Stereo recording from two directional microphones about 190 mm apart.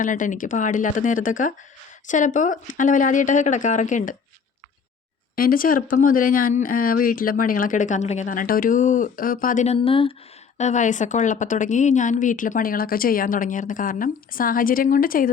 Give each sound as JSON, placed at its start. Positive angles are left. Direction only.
{"t": 0.0, "sound": "speech", "side_deg": 45}
{"t": 5.4, "sound": "speech", "side_deg": 50}
{"t": 9.7, "sound": "speech", "side_deg": 30}